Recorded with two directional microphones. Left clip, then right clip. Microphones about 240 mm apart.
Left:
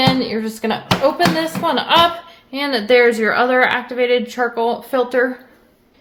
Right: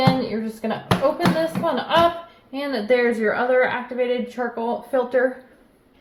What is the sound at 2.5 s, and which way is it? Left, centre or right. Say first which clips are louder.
A woman's voice: left 6 dB; left.